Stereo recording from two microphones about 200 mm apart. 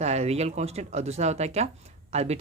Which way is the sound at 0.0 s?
35° right (ahead or behind).